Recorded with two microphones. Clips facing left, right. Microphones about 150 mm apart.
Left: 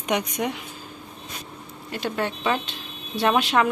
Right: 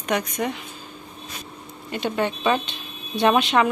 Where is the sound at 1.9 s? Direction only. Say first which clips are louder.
Right 3 dB; centre (ahead or behind).